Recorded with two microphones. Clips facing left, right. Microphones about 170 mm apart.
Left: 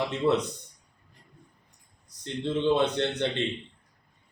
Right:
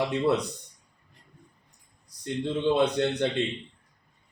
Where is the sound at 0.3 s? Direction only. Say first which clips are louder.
Left 1 dB; 10° right (ahead or behind).